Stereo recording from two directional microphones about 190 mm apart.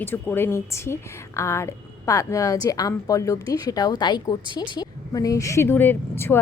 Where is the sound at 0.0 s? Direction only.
10° left (ahead or behind).